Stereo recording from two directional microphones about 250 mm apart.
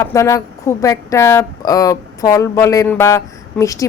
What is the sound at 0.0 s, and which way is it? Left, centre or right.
A woman's voice, centre.